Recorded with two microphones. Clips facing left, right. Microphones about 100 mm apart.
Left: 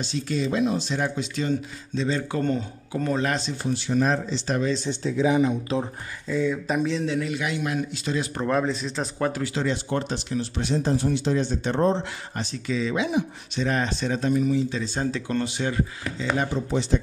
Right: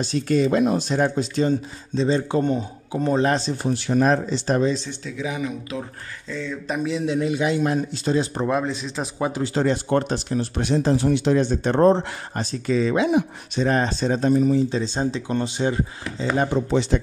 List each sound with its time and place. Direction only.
0.0 s speech: 50° right (ahead or behind); by 3.5 s 30° right (ahead or behind)
3.6 s speech: 55° right (ahead or behind)
5.0 s speech: 30° left (ahead or behind)
6.2 s speech: 10° left (ahead or behind)
6.8 s a man's voice: 10° right (ahead or behind)
7.2 s speech: 25° right (ahead or behind)
8.5 s speech: 5° right (ahead or behind)
9.3 s speech: 25° right (ahead or behind)
9.6 s speech: 50° right (ahead or behind); by 15.8 s 25° right (ahead or behind)
16.4 s speech: 65° right (ahead or behind)